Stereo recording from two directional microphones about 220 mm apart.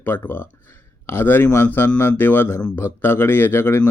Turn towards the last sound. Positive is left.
turn(degrees=10)  # may be behind; listen again after turning